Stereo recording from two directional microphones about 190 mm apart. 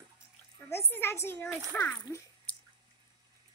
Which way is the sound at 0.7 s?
10° left (ahead or behind).